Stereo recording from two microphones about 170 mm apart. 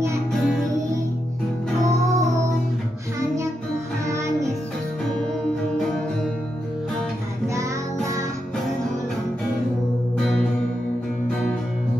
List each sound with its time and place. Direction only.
0.3 s music: centre (ahead or behind)
1.9 s music: 20° right (ahead or behind)
7.4 s music: 20° right (ahead or behind)